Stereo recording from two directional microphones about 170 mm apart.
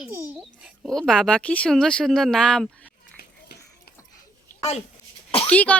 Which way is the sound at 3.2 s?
65° left (ahead or behind).